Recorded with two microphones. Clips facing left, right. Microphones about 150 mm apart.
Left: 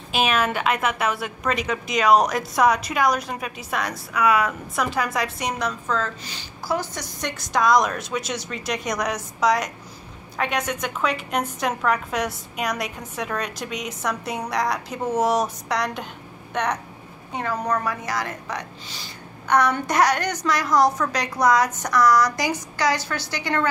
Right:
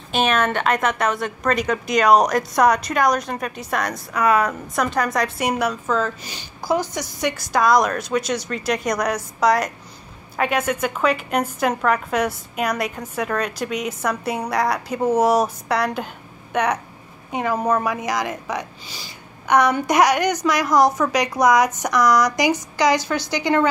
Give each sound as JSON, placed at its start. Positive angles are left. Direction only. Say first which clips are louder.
{"t": 0.1, "sound": "a woman's voice", "louder": "right 2 dB", "side_deg": 5}
{"t": 4.1, "sound": "speech", "louder": "right 2 dB", "side_deg": -40}
{"t": 4.7, "sound": "a woman's voice", "louder": "right 4 dB", "side_deg": 5}
{"t": 17.3, "sound": "a woman's voice", "louder": "right 4 dB", "side_deg": -15}